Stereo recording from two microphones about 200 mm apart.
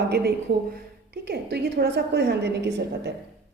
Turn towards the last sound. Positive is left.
turn(degrees=-60)  # may be behind; listen again after turning